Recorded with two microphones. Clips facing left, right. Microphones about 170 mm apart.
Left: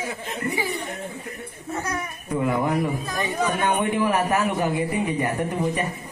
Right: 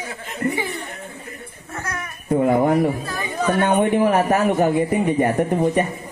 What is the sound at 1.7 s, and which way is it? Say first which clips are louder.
Speech: left 2 dB; 15° left (ahead or behind).